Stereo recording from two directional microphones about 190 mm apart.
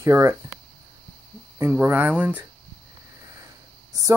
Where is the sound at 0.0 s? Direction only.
15° right (ahead or behind).